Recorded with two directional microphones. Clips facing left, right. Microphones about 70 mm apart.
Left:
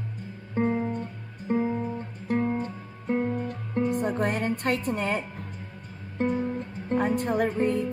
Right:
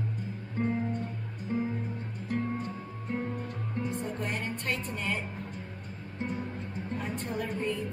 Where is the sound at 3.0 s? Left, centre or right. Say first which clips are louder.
Left 8 dB; left.